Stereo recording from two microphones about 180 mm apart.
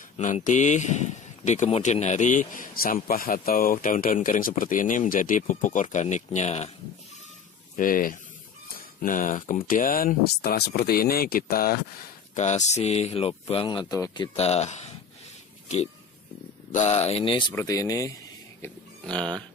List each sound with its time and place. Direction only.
0.2 s speech: 45° left (ahead or behind)
7.7 s speech: 50° left (ahead or behind)
12.4 s speech: 40° left (ahead or behind)
16.7 s speech: 40° left (ahead or behind); by 18.1 s 20° left (ahead or behind)
18.6 s burping: 5° left (ahead or behind)